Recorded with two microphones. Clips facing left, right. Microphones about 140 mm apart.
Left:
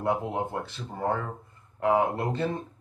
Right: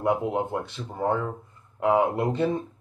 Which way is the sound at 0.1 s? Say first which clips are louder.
Right 2 dB; 15° right (ahead or behind).